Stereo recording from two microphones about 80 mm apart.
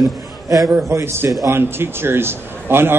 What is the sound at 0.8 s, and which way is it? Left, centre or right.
A man's voice, right.